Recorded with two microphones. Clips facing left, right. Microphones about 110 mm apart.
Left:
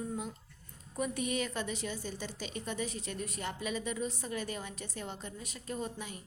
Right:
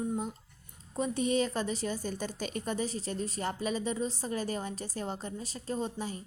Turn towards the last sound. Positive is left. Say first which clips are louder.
# right 5 dB
turn(degrees=-30)  # may be behind; listen again after turning